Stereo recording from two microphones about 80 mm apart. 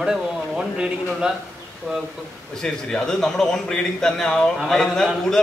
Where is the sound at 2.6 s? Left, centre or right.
Centre.